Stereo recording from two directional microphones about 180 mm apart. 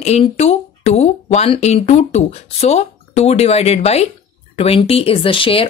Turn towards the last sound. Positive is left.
turn(degrees=30)  # may be behind; listen again after turning